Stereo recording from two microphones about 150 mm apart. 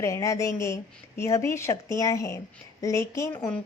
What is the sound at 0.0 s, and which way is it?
Speech, 20° left (ahead or behind).